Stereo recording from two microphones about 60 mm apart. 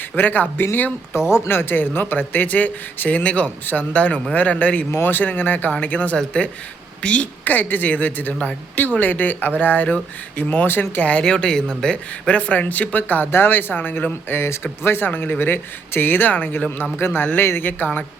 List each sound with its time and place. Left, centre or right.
0.2 s speech: left
11.1 s speech: centre